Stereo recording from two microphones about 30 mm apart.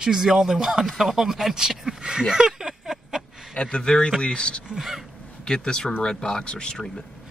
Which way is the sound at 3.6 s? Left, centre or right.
Left.